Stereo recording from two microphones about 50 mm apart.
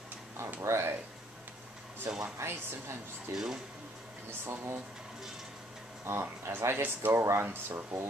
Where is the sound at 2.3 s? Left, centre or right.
Right.